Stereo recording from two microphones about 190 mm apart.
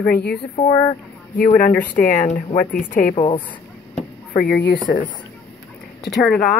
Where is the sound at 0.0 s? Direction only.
55° left (ahead or behind).